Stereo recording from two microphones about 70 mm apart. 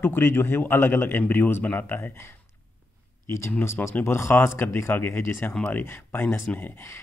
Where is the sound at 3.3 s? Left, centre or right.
Left.